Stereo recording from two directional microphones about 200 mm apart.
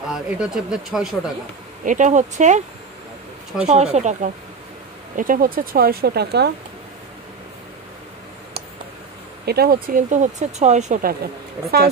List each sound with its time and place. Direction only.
0.1 s speech: 5° right (ahead or behind)
1.9 s speech: 40° right (ahead or behind)
3.6 s speech: 35° right (ahead or behind); by 6.5 s 55° right (ahead or behind)
9.5 s speech: 50° right (ahead or behind)